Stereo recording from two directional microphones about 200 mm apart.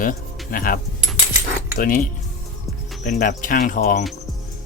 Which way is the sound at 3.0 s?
40° left (ahead or behind).